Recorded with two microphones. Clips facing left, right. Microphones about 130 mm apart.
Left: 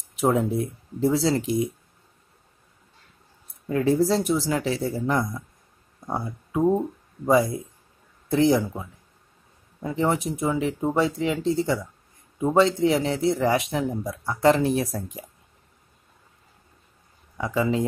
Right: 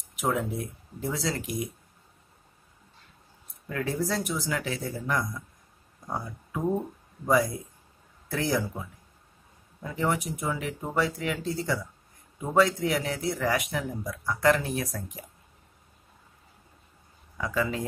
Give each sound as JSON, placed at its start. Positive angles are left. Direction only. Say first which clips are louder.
{"t": 0.1, "sound": "speech", "louder": "left 7 dB", "side_deg": 30}
{"t": 3.6, "sound": "speech", "louder": "left 9 dB", "side_deg": 25}
{"t": 17.4, "sound": "speech", "louder": "left 5 dB", "side_deg": 20}